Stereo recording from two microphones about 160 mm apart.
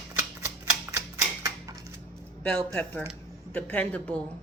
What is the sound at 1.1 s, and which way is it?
Typewriter, 20° right (ahead or behind).